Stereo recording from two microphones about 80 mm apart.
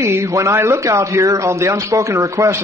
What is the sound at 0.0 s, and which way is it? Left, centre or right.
Speech, right.